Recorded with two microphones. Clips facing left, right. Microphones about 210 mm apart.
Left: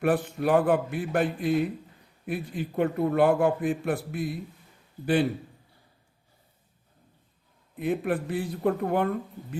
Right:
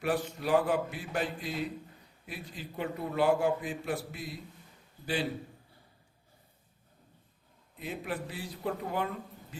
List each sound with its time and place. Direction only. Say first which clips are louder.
0.0 s a man's voice: left 7 dB; 55° left (ahead or behind)
7.8 s a man's voice: left 10 dB; 55° left (ahead or behind)